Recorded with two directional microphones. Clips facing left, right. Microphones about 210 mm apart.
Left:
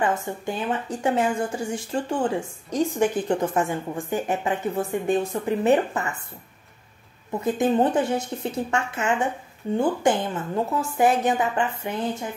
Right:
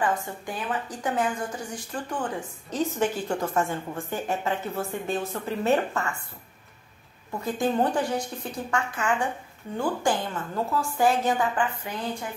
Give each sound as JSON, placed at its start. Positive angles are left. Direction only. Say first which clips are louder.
{"t": 0.0, "sound": "a woman's voice", "louder": "left 3 dB", "side_deg": 25}
{"t": 2.7, "sound": "a woman's voice", "louder": "left 4 dB", "side_deg": 15}
{"t": 7.3, "sound": "a woman's voice", "louder": "left 4 dB", "side_deg": 20}